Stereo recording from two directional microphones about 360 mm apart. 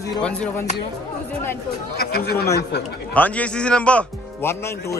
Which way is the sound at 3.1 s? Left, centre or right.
Centre.